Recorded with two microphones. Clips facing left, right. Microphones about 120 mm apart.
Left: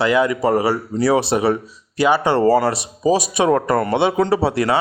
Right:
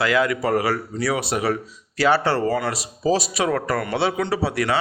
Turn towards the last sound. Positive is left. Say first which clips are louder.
# left 5 dB
turn(degrees=25)  # may be behind; listen again after turning